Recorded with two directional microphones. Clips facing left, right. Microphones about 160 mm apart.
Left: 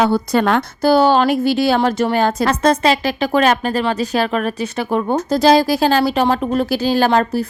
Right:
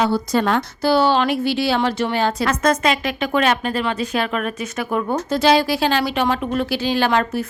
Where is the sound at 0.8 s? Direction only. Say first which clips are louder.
Left 4 dB; 45° left (ahead or behind).